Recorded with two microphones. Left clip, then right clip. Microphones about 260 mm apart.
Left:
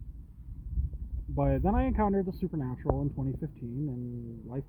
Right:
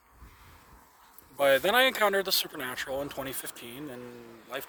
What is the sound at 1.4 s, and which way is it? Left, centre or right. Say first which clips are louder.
Speech: right 8 dB; right.